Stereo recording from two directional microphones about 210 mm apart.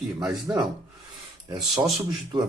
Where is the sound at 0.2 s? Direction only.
15° right (ahead or behind).